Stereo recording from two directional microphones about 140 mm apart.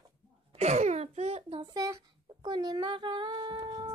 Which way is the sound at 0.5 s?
50° right (ahead or behind).